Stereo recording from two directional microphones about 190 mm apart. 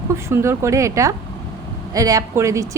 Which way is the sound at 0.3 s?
15° right (ahead or behind).